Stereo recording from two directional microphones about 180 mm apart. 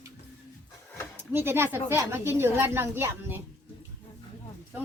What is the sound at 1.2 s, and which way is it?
Speech, 10° right (ahead or behind).